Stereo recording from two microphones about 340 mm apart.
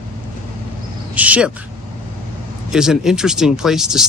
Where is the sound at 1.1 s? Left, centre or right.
Centre.